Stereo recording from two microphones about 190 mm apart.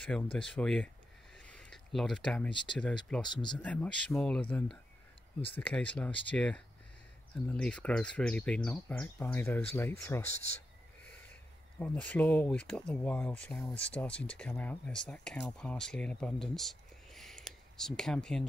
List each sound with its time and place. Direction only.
0.0 s speech: 5° left (ahead or behind)
1.3 s a sound: 5° left (ahead or behind)
2.5 s speech: 25° left (ahead or behind)
3.1 s speech: 5° left (ahead or behind)
11.8 s speech: 5° left (ahead or behind)